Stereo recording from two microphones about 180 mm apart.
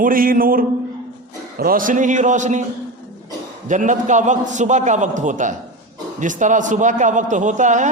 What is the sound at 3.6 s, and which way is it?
A man's voice, 45° right (ahead or behind).